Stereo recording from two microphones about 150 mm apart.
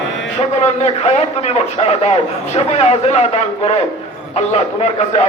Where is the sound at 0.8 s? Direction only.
45° left (ahead or behind).